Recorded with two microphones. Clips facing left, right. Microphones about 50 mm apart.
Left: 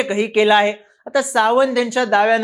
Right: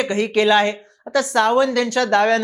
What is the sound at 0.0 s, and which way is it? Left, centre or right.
Speech, centre.